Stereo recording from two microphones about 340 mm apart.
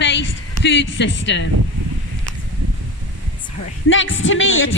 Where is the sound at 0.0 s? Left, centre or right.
Left.